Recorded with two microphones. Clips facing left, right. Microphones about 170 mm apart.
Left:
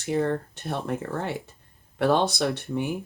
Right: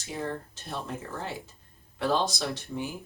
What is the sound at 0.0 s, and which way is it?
Speech, 60° left (ahead or behind).